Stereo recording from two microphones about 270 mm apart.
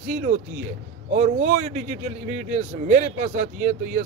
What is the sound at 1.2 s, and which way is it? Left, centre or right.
Speech, right.